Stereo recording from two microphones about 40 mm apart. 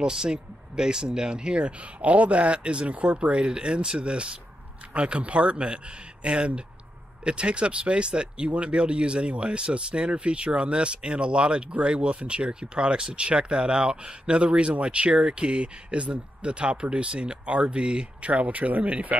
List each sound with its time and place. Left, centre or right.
0.0 s speech: centre; by 19.1 s right